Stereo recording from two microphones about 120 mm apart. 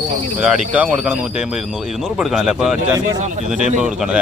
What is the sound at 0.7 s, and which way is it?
Speech, 10° right (ahead or behind).